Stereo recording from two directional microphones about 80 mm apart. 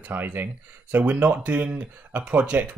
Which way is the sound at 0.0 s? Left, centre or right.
Right.